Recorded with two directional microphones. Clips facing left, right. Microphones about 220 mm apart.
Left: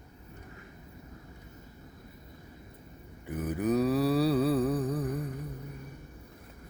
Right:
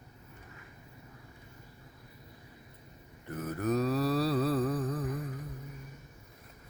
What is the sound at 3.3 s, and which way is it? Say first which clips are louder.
Mantra: left 3 dB; 15° left (ahead or behind).